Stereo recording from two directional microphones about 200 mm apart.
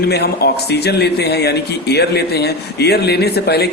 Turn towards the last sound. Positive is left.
turn(degrees=55)  # may be behind; listen again after turning